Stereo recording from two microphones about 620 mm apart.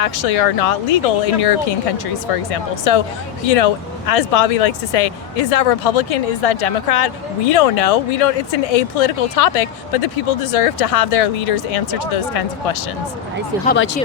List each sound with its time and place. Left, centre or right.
0.0 s speech: left
13.7 s speech: centre